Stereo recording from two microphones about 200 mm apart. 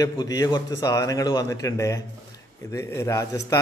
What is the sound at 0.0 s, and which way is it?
A man's voice, 20° left (ahead or behind).